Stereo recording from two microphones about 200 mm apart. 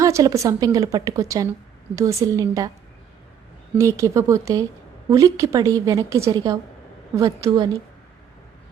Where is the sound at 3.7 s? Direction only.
15° right (ahead or behind).